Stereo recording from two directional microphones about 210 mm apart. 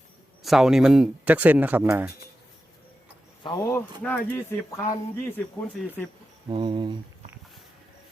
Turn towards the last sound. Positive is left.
turn(degrees=-20)  # may be behind; listen again after turning